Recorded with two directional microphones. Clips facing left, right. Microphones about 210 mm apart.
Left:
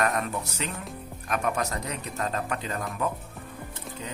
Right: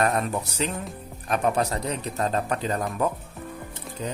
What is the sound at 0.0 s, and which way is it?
Speech, 35° right (ahead or behind).